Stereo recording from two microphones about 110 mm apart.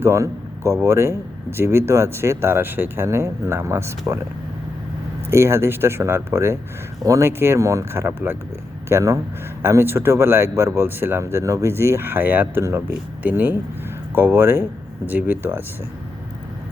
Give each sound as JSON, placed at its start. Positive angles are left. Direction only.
{"t": 0.0, "sound": "speech", "side_deg": -25}
{"t": 5.3, "sound": "speech", "side_deg": -25}